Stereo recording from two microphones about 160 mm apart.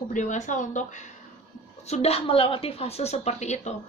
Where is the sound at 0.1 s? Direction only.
50° left (ahead or behind).